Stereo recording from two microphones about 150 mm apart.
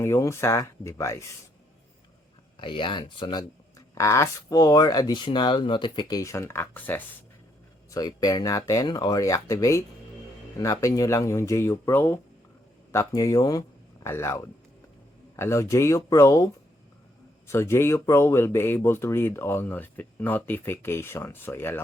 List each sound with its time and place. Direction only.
0.0 s speech: 20° left (ahead or behind)
2.6 s speech: 35° left (ahead or behind); by 7.0 s 10° left (ahead or behind)
7.9 s speech: 25° left (ahead or behind)
17.5 s speech: 15° left (ahead or behind)